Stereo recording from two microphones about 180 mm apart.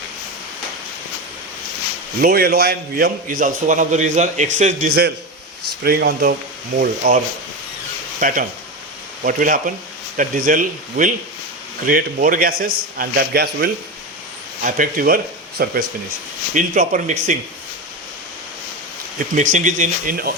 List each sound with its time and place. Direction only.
2.2 s a man's voice: 60° right (ahead or behind); by 4.9 s 45° right (ahead or behind)
5.8 s a man's voice: 60° right (ahead or behind)
6.7 s a man's voice: 50° right (ahead or behind)
8.2 s a man's voice: 50° right (ahead or behind)
14.6 s a man's voice: 50° right (ahead or behind)
19.3 s a man's voice: 45° right (ahead or behind)